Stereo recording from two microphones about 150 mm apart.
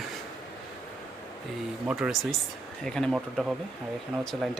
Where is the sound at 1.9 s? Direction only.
5° right (ahead or behind).